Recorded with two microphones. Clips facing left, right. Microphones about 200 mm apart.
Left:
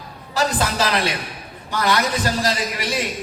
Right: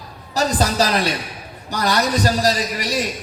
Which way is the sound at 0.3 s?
40° right (ahead or behind).